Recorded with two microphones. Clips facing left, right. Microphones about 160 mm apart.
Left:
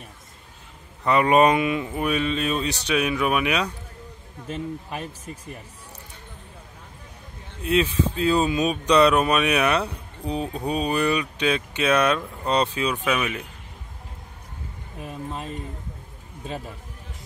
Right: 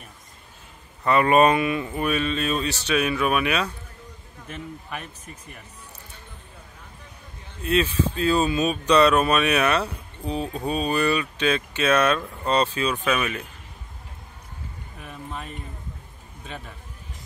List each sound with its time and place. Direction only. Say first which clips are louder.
1.0 s speech: even; 15° left (ahead or behind)
4.5 s a man's voice: left 5 dB; 30° left (ahead or behind)
7.6 s speech: left 1 dB; 15° left (ahead or behind)
15.0 s a man's voice: left 4 dB; 30° left (ahead or behind)